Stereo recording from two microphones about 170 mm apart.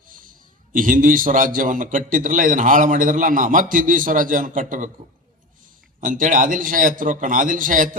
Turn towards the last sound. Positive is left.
turn(degrees=-50)  # may be behind; listen again after turning